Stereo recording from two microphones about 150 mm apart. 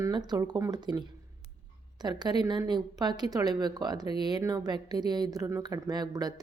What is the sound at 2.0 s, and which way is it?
A woman's voice, 30° right (ahead or behind).